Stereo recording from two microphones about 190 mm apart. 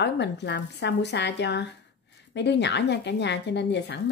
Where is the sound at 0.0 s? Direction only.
65° left (ahead or behind).